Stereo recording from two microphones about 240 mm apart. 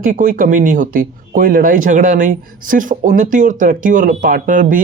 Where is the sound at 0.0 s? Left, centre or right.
Right.